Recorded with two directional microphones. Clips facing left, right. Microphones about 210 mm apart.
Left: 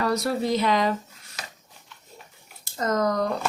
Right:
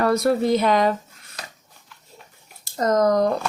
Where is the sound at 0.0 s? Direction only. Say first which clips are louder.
Right 5 dB; 55° right (ahead or behind).